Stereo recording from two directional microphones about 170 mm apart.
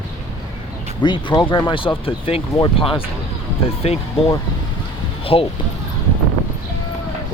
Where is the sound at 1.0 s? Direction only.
25° left (ahead or behind).